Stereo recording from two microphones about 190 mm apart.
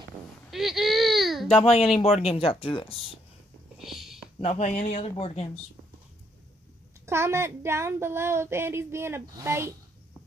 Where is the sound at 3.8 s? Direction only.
Centre (ahead or behind).